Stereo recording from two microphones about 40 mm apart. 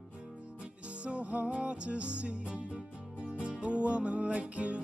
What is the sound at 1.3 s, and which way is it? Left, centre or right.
Music, right.